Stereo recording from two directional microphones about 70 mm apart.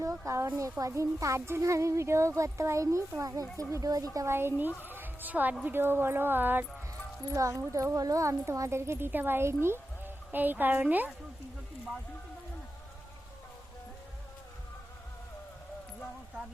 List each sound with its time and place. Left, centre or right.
0.0 s speech: right
4.3 s a woman's voice: right
7.3 s speech: right